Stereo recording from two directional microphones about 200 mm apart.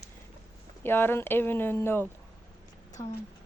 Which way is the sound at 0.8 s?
10° left (ahead or behind).